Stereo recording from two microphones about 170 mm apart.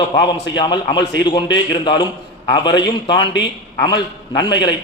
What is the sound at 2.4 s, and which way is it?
A man's voice, 25° left (ahead or behind).